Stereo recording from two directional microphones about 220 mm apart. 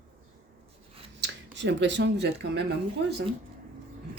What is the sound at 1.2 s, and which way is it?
Speech, 55° right (ahead or behind).